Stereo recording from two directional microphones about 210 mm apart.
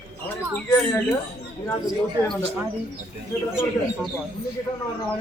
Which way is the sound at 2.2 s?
15° right (ahead or behind).